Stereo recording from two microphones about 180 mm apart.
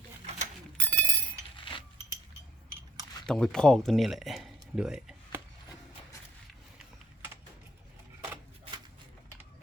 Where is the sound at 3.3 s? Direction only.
5° left (ahead or behind).